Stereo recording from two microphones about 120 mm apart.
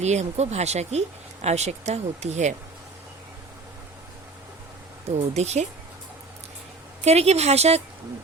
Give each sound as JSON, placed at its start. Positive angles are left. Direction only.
{"t": 0.0, "sound": "speech", "side_deg": -65}
{"t": 5.1, "sound": "speech", "side_deg": -65}
{"t": 7.0, "sound": "speech", "side_deg": -65}